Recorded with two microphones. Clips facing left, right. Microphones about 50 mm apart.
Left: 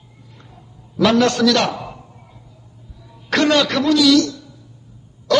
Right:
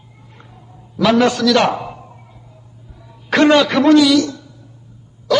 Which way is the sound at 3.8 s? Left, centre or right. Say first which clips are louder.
Right 6 dB; right.